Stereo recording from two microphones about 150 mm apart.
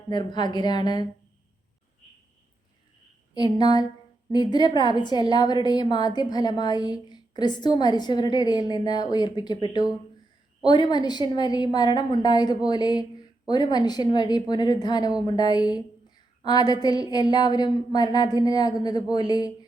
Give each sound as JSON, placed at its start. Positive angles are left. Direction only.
{"t": 0.1, "sound": "a woman's voice", "side_deg": 30}
{"t": 3.3, "sound": "a woman's voice", "side_deg": 30}